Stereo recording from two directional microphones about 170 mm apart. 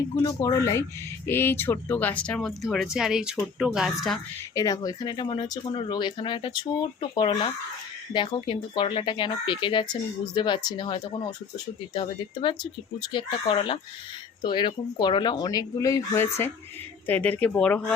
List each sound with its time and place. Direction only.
0.2 s speech: 20° left (ahead or behind); by 4.2 s centre (ahead or behind)
4.5 s speech: 20° left (ahead or behind)